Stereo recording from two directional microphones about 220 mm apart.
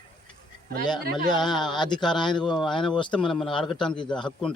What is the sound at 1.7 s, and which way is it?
Speech, 20° left (ahead or behind).